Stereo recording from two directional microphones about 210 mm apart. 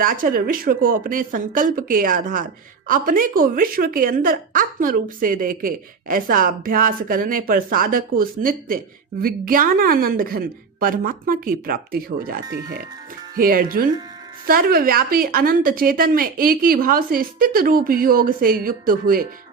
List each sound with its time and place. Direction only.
0.0 s a woman's voice: 40° right (ahead or behind)